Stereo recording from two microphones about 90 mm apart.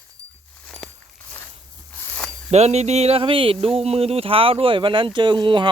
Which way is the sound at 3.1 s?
80° right.